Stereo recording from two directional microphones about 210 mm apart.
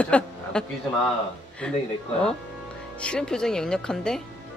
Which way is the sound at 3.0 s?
5° left (ahead or behind).